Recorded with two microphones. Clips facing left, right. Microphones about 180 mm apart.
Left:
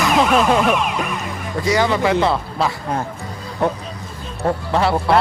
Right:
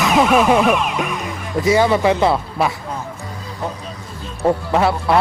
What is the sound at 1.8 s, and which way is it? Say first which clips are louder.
Speech: right 1 dB; 15° right (ahead or behind).